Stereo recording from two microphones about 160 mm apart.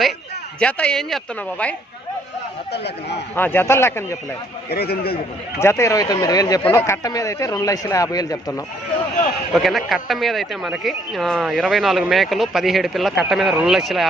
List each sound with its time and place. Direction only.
0.6 s speech: 5° left (ahead or behind)
2.7 s a man's voice: 90° left
3.3 s speech: 15° left (ahead or behind)
4.7 s a man's voice: 75° left (ahead or behind)
5.5 s speech: 15° left (ahead or behind)
9.5 s speech: centre (ahead or behind)